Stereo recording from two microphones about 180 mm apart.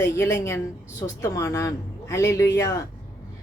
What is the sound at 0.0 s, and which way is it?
A woman's voice, 15° left (ahead or behind).